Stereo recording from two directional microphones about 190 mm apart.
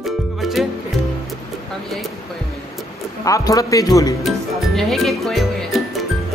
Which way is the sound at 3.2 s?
20° left (ahead or behind).